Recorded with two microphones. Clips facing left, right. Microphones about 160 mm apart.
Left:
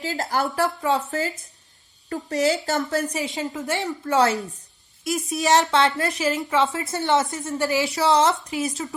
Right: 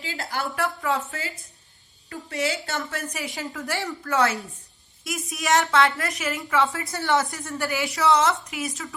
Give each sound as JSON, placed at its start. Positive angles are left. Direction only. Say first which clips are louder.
{"t": 0.0, "sound": "a woman's voice", "louder": "left 6 dB", "side_deg": 40}
{"t": 1.1, "sound": "a woman's voice", "louder": "left 8 dB", "side_deg": 45}
{"t": 3.1, "sound": "a woman's voice", "louder": "left 5 dB", "side_deg": 25}